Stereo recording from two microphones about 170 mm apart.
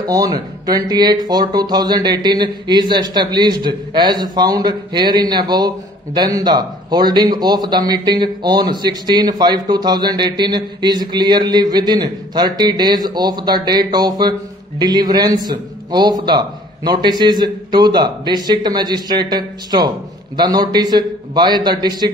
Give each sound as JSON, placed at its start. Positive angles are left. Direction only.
{"t": 0.0, "sound": "speech", "side_deg": -20}